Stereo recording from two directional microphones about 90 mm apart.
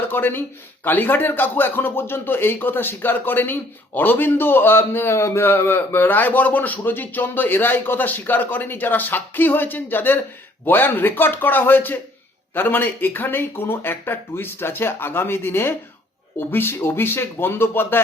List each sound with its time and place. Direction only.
0.1 s speech: 25° left (ahead or behind)